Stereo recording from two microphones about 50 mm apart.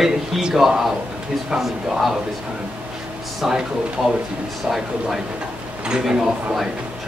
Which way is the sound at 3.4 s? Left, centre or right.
Centre.